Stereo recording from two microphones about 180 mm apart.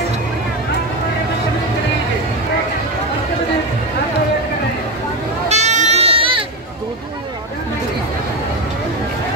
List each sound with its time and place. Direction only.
5.5 s sheep: 40° right (ahead or behind)